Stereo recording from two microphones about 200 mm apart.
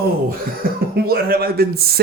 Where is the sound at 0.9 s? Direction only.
50° right (ahead or behind).